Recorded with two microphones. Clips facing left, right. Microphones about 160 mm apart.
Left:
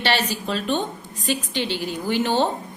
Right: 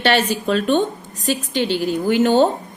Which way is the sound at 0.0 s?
50° right (ahead or behind).